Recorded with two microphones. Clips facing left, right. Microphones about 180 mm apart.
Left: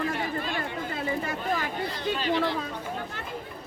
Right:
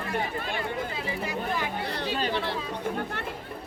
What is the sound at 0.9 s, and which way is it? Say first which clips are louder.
Speech: left 2 dB; 50° left (ahead or behind).